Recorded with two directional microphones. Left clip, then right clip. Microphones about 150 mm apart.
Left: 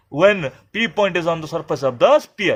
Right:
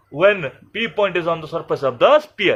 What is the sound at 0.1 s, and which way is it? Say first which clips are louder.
A man's voice: left 1 dB; 55° left (ahead or behind).